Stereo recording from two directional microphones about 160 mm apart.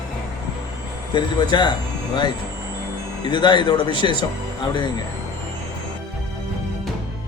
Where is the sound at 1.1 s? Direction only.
30° left (ahead or behind).